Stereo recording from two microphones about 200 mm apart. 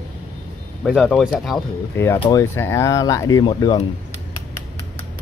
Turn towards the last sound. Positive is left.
turn(degrees=25)  # may be behind; listen again after turning